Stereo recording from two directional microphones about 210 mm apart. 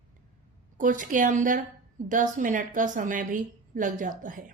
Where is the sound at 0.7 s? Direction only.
40° right (ahead or behind).